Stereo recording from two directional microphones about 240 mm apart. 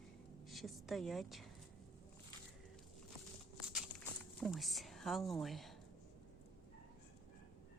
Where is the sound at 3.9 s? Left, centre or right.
Left.